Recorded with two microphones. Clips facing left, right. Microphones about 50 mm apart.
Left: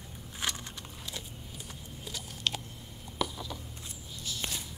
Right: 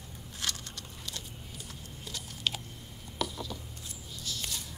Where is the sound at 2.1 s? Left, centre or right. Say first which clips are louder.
Even; centre.